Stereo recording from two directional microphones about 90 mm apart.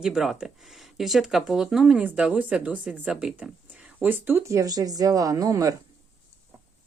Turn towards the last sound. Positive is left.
turn(degrees=-40)  # may be behind; listen again after turning